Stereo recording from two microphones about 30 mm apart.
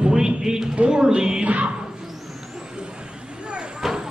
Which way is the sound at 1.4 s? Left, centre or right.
Right.